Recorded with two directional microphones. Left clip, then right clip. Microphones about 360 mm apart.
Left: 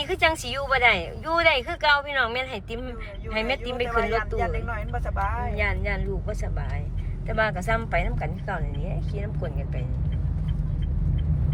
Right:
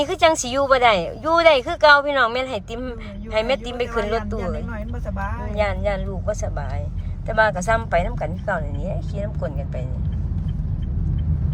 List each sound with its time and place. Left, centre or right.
0.0 s speech: centre
5.5 s speech: centre
7.3 s speech: centre